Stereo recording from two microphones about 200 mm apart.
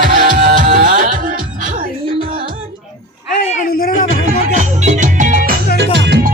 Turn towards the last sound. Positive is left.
turn(degrees=-60)  # may be behind; listen again after turning